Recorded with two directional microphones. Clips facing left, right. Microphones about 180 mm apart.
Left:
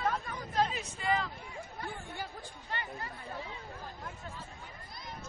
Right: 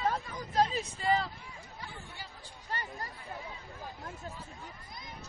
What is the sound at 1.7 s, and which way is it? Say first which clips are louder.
Chatter: left 6 dB; 55° left (ahead or behind).